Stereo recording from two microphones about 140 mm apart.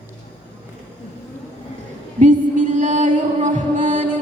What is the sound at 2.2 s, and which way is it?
Music, 60° right (ahead or behind).